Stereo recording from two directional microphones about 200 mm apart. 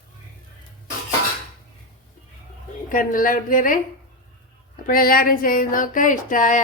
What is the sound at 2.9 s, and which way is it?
Speech, 45° left (ahead or behind).